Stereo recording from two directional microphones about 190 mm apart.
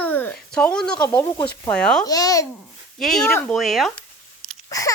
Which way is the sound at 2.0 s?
20° left (ahead or behind).